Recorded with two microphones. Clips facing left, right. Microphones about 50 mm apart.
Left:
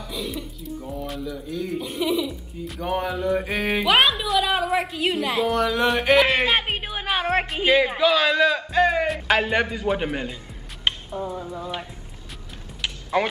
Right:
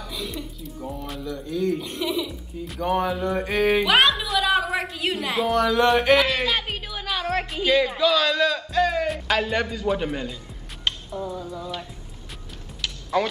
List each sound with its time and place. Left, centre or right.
0.1 s speech: centre
6.2 s music: left
7.6 s a man's voice: left
12.8 s music: left